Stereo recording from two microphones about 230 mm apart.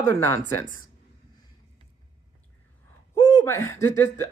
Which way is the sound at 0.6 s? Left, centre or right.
Left.